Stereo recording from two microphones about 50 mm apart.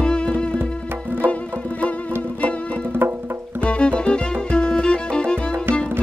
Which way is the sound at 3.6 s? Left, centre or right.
Left.